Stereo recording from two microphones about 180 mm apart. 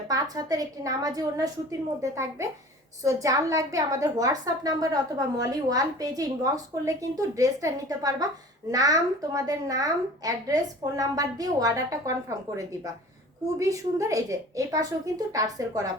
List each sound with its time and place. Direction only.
0.1 s a woman's voice: 20° right (ahead or behind)
13.6 s a woman's voice: 15° right (ahead or behind)